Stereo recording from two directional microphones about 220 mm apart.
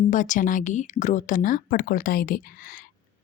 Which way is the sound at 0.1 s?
35° left (ahead or behind).